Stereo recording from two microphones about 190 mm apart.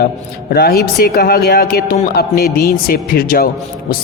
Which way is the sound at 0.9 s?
55° left (ahead or behind).